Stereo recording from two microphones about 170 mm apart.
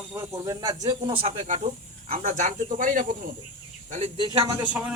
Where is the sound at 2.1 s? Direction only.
45° right (ahead or behind).